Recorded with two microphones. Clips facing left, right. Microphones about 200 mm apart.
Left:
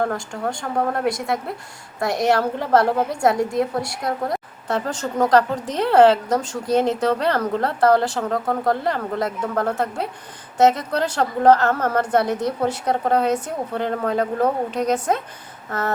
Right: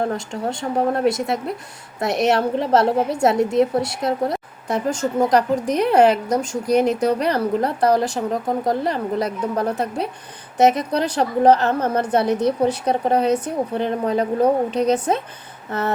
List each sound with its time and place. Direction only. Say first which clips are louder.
0.0 s a woman's voice: right 1 dB; 20° right (ahead or behind)
4.7 s a woman's voice: right 3 dB; 10° right (ahead or behind)